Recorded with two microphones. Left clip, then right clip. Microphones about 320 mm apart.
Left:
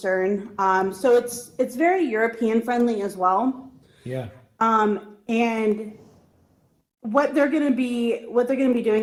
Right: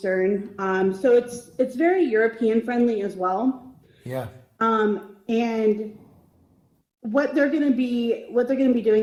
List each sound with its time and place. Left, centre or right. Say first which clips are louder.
0.0 s speech: even; centre
4.5 s a woman's voice: left 2 dB; centre
7.0 s speech: left 1 dB; centre